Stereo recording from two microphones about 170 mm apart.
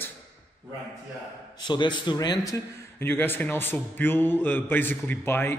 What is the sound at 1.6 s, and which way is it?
A man's voice, 25° left (ahead or behind).